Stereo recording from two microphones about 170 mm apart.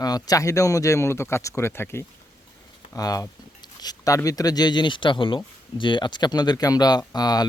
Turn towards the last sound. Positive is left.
turn(degrees=25)  # may be behind; listen again after turning